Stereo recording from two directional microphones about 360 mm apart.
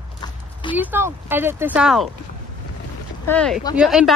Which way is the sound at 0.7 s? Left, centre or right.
Centre.